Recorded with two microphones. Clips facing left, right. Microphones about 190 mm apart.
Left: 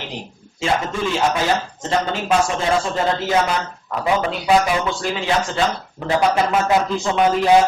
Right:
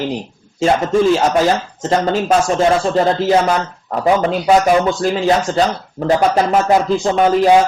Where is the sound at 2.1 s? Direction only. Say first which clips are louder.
Right 4 dB; 40° right (ahead or behind).